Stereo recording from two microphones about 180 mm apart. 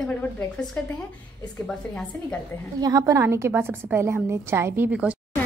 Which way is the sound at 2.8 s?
20° right (ahead or behind).